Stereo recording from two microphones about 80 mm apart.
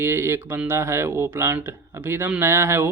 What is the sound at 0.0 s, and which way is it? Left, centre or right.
Speech, right.